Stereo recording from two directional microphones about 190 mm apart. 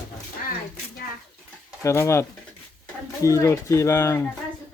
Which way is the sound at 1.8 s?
15° left (ahead or behind).